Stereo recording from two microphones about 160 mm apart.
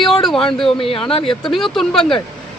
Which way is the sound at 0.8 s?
35° left (ahead or behind).